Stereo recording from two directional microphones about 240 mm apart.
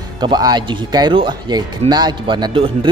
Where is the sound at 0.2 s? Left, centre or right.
Centre.